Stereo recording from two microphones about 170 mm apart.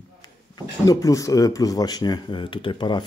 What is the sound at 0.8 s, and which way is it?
Speech, 20° left (ahead or behind).